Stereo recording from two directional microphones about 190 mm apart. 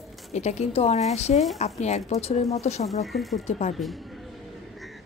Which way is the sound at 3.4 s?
35° left (ahead or behind).